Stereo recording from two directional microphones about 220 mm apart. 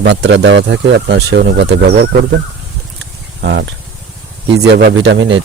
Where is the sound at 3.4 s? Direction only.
45° right (ahead or behind).